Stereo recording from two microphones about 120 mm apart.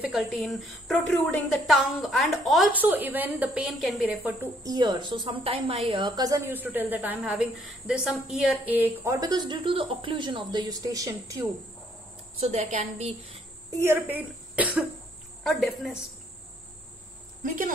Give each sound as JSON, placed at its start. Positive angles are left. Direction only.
{"t": 0.0, "sound": "a woman's voice", "side_deg": 0}
{"t": 2.7, "sound": "a woman's voice", "side_deg": -15}
{"t": 4.1, "sound": "a woman's voice", "side_deg": -15}
{"t": 4.6, "sound": "a woman's voice", "side_deg": -35}
{"t": 6.4, "sound": "a woman's voice", "side_deg": -15}
{"t": 8.7, "sound": "a woman's voice", "side_deg": -20}
{"t": 12.4, "sound": "a woman's voice", "side_deg": -65}
{"t": 13.7, "sound": "speech", "side_deg": -25}
{"t": 15.4, "sound": "a woman's voice", "side_deg": 0}